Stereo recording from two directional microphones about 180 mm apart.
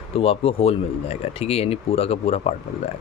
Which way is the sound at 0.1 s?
30° left (ahead or behind).